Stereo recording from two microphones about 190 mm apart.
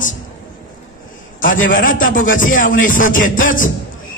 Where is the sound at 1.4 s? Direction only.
45° left (ahead or behind).